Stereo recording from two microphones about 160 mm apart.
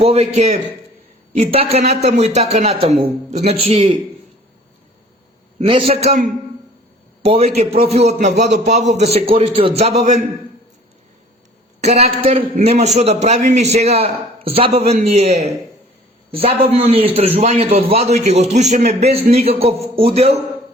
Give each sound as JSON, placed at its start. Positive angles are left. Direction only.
{"t": 0.0, "sound": "a man's voice", "side_deg": -40}
{"t": 5.5, "sound": "a man's voice", "side_deg": -35}
{"t": 11.8, "sound": "a man's voice", "side_deg": -45}